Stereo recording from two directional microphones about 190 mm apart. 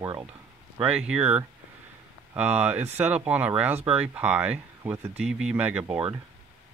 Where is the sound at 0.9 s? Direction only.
5° right (ahead or behind).